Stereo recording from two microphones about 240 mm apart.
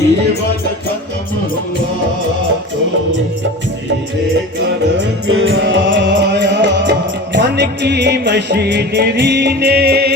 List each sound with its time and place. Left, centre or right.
5.3 s music: right